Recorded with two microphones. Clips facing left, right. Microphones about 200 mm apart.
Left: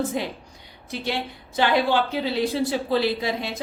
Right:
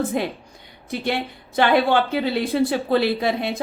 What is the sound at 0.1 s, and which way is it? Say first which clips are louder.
A woman's voice: right 4 dB; 55° right (ahead or behind).